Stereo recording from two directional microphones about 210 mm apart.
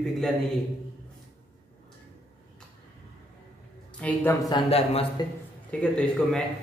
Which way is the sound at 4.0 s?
10° left (ahead or behind).